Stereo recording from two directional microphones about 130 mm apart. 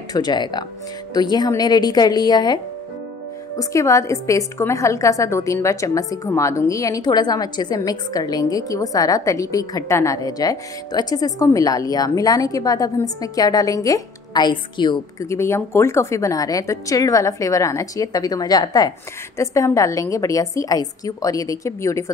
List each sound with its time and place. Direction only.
0.1 s a woman's voice: 35° left (ahead or behind)
15.1 s a woman's voice: 20° left (ahead or behind)